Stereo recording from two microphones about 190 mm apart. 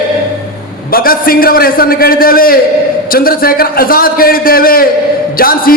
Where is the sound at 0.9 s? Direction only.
50° left (ahead or behind).